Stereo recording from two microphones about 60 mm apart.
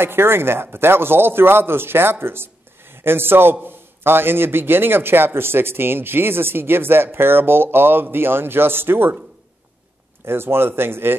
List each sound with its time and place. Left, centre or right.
0.0 s a man's voice: right
10.2 s a man's voice: right